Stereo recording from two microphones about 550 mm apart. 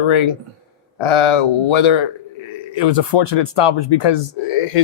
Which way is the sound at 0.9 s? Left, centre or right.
Left.